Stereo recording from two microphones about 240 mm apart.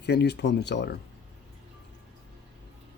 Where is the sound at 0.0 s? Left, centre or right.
Left.